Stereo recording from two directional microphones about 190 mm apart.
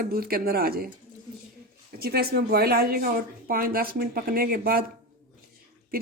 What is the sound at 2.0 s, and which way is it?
Speech, 55° right (ahead or behind).